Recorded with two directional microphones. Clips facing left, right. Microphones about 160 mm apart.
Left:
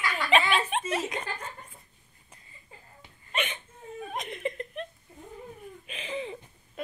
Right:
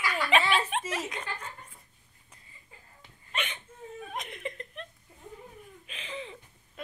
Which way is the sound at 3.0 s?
5° left (ahead or behind).